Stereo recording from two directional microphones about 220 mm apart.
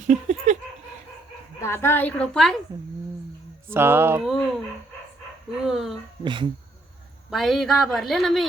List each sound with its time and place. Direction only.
0.1 s dog: 30° right (ahead or behind)
1.6 s a woman's voice: 10° left (ahead or behind)
3.7 s speech: 10° right (ahead or behind)
4.3 s speech: centre (ahead or behind)
6.2 s speech: 20° right (ahead or behind)
7.3 s speech: centre (ahead or behind)